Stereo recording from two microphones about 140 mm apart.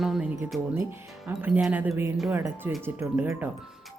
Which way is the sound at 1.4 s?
10° right (ahead or behind).